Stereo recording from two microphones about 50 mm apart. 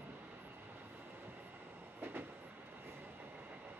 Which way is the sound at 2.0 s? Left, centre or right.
Right.